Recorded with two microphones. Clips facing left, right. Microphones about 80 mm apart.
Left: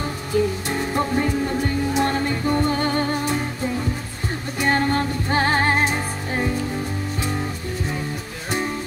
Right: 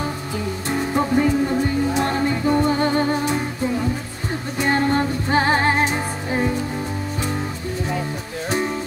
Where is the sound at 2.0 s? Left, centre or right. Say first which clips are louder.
Right 1 dB; centre.